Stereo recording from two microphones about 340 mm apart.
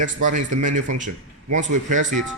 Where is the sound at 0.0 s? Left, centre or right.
Right.